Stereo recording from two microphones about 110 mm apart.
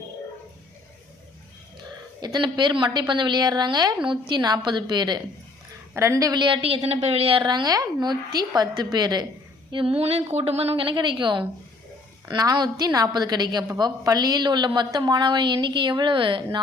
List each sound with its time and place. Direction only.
2.2 s a woman's voice: 40° right (ahead or behind)
5.9 s a woman's voice: 25° right (ahead or behind)
6.4 s a woman's voice: 50° right (ahead or behind)
6.8 s a woman's voice: 75° right (ahead or behind); by 9.2 s 40° right (ahead or behind)
10.0 s a woman's voice: 70° right (ahead or behind); by 11.4 s 50° right (ahead or behind)
12.3 s a woman's voice: 40° right (ahead or behind)